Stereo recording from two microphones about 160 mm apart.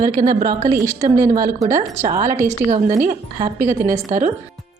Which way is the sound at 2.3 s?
15° right (ahead or behind).